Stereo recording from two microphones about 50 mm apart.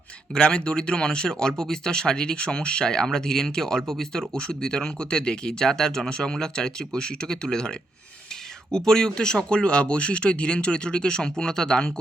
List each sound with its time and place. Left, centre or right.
0.3 s speech: centre